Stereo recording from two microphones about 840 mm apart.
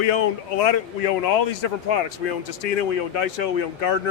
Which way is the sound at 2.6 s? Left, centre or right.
Left.